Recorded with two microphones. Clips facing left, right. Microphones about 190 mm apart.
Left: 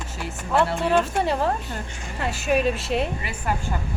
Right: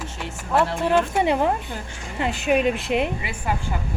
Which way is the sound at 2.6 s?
15° right (ahead or behind).